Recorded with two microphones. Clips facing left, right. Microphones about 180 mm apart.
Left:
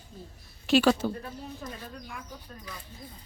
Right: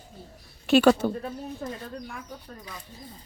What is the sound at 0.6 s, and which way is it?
Speech, 60° right (ahead or behind).